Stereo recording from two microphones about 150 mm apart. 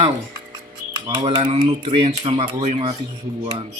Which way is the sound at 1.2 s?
30° right (ahead or behind).